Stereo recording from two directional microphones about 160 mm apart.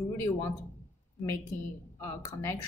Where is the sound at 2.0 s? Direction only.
15° left (ahead or behind).